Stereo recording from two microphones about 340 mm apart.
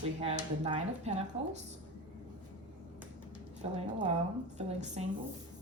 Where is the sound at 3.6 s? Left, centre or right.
Centre.